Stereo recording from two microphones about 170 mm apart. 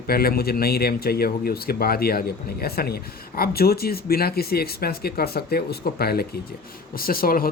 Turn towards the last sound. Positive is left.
turn(degrees=60)  # may be behind; listen again after turning